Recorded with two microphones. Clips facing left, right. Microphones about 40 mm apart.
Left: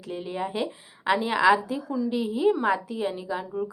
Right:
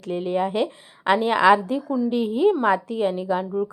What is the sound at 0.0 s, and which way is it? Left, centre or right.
A woman's voice, right.